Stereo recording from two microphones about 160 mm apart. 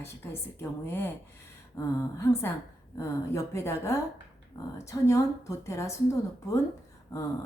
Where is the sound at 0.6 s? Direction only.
15° left (ahead or behind).